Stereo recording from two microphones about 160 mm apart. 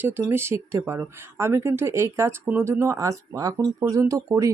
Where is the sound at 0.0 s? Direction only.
15° right (ahead or behind).